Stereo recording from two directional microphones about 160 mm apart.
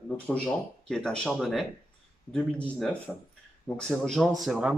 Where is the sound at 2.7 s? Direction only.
5° left (ahead or behind).